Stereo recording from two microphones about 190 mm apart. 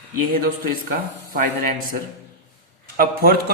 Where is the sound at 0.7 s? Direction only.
45° right (ahead or behind).